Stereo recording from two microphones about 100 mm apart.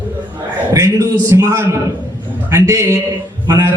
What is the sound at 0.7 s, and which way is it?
A man's voice, 30° right (ahead or behind).